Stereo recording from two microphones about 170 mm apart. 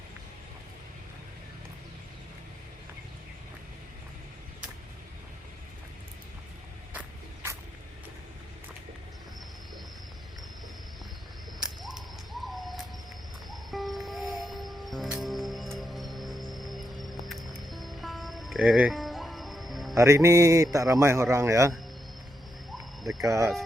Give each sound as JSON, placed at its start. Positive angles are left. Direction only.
{"t": 11.9, "sound": "owl", "side_deg": 0}
{"t": 13.5, "sound": "music", "side_deg": 0}
{"t": 20.0, "sound": "a man's voice", "side_deg": -20}
{"t": 22.7, "sound": "cricket", "side_deg": 0}
{"t": 23.2, "sound": "speech", "side_deg": -20}